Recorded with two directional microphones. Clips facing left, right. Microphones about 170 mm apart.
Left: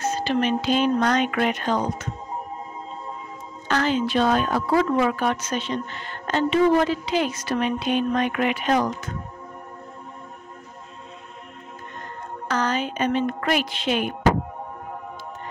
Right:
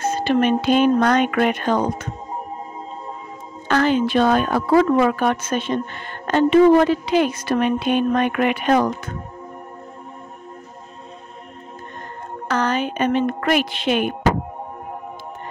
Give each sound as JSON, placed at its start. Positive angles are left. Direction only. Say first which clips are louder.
{"t": 0.0, "sound": "a woman's voice", "louder": "right 4 dB", "side_deg": -55}
{"t": 3.6, "sound": "a woman's voice", "louder": "right 5 dB", "side_deg": -55}
{"t": 12.4, "sound": "a woman's voice", "louder": "right 3 dB", "side_deg": -60}